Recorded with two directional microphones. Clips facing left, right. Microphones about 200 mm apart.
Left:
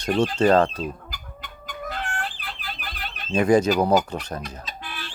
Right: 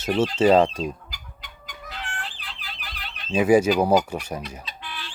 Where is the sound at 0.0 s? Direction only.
5° right (ahead or behind).